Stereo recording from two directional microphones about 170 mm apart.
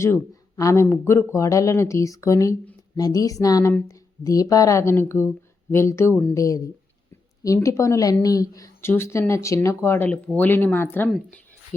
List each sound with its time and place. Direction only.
0.0 s a woman's voice: 15° left (ahead or behind)